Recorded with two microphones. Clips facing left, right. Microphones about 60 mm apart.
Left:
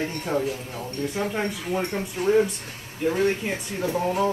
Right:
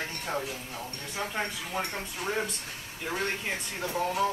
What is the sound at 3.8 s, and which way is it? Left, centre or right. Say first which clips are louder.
Speech: left 6 dB; left.